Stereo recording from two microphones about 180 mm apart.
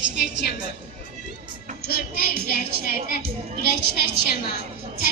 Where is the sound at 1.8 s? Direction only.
60° left (ahead or behind).